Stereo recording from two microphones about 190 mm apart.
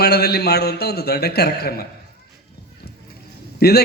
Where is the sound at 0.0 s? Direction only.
55° left (ahead or behind).